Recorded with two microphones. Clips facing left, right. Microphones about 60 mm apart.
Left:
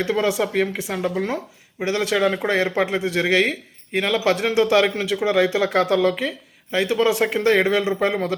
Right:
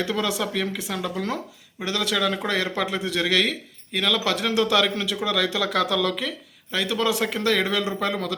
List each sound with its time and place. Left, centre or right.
0.0 s a man's voice: left